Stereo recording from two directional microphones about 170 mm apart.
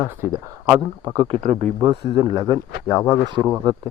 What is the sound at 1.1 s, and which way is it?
Speech, 35° right (ahead or behind).